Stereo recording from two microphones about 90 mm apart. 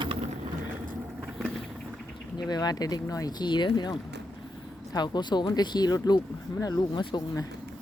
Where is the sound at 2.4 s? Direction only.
45° left (ahead or behind).